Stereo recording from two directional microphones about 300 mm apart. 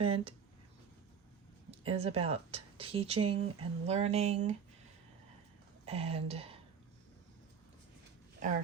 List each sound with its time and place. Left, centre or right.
0.0 s speech: centre
1.8 s speech: centre
5.8 s speech: centre
8.4 s speech: right